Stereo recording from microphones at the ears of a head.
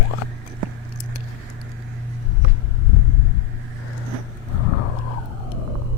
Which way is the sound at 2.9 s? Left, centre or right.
Left.